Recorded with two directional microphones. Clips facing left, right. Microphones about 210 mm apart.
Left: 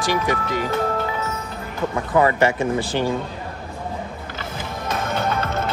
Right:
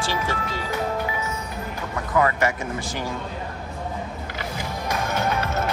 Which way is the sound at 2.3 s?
30° left (ahead or behind).